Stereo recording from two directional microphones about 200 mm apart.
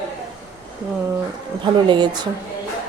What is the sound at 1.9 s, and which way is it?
Speech, 20° right (ahead or behind).